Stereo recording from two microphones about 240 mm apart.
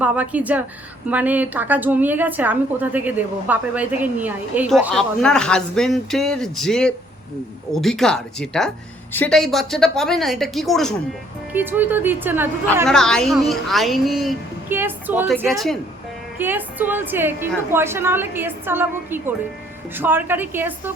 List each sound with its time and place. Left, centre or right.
0.0 s a woman's voice: centre
12.9 s a woman's voice: centre